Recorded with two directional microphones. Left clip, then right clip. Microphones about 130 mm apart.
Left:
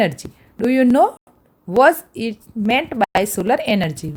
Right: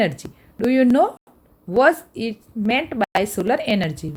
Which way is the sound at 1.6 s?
40° left (ahead or behind).